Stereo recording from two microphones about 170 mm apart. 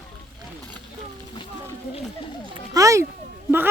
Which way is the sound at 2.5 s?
20° right (ahead or behind).